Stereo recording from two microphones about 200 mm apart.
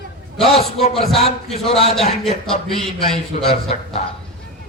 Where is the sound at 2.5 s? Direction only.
30° left (ahead or behind).